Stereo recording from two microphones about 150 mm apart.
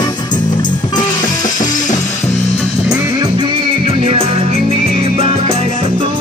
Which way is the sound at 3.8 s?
40° right (ahead or behind).